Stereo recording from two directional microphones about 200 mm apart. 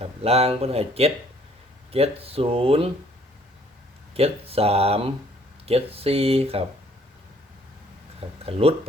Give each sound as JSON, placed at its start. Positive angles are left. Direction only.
{"t": 0.0, "sound": "speech", "side_deg": -30}
{"t": 4.1, "sound": "speech", "side_deg": -30}
{"t": 8.4, "sound": "speech", "side_deg": -30}